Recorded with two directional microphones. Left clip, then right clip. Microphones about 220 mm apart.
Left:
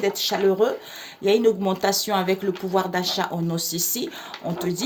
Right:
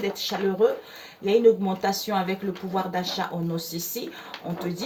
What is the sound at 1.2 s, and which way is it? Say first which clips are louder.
Speech: even; 50° left (ahead or behind).